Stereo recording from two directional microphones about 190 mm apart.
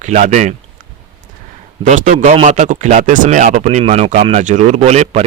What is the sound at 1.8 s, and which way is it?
A man's voice, 40° right (ahead or behind).